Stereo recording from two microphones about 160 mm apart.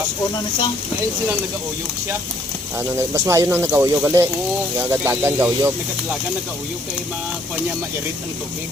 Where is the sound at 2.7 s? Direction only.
15° right (ahead or behind).